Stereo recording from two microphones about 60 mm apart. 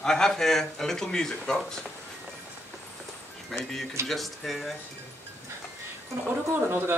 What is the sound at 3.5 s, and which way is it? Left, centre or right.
A man's voice, centre.